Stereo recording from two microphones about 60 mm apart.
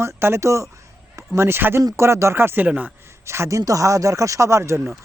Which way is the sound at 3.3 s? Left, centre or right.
Right.